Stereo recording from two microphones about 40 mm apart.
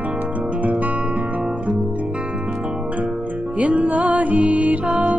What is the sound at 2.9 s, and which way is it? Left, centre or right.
Music, right.